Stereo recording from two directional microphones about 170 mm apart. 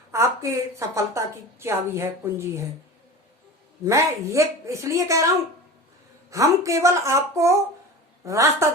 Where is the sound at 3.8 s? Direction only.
15° right (ahead or behind).